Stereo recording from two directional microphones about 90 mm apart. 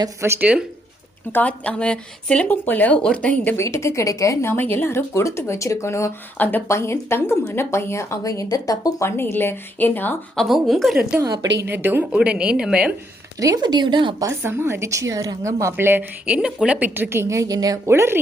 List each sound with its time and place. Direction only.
0.3 s a woman's voice: 15° right (ahead or behind)
1.3 s speech: 20° left (ahead or behind)
3.6 s speech: 30° left (ahead or behind)
6.3 s a woman's voice: 20° left (ahead or behind); by 9.0 s 40° left (ahead or behind)
9.0 s a woman's voice: 25° left (ahead or behind)
10.3 s a woman's voice: centre (ahead or behind)
11.7 s speech: 25° right (ahead or behind)
12.1 s a woman's voice: 15° right (ahead or behind)
13.4 s speech: 45° right (ahead or behind); by 14.2 s 65° right (ahead or behind)
14.2 s a woman's voice: 30° right (ahead or behind)
16.2 s a woman's voice: 10° right (ahead or behind)
16.9 s a woman's voice: 25° right (ahead or behind); by 17.9 s 45° right (ahead or behind)
17.9 s speech: 30° right (ahead or behind)